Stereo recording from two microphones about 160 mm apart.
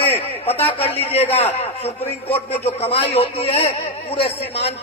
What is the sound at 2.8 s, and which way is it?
A man's voice, 40° left (ahead or behind).